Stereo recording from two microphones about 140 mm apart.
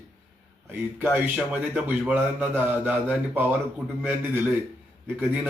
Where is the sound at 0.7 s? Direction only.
10° right (ahead or behind).